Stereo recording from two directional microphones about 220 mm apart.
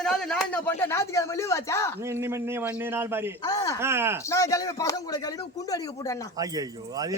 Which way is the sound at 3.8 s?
10° right (ahead or behind).